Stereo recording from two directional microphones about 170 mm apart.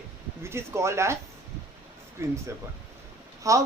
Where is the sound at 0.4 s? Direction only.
15° right (ahead or behind).